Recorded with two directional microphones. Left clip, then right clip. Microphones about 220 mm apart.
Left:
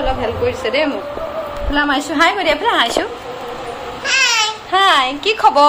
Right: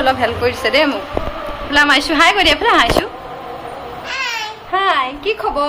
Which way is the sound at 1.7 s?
30° left (ahead or behind).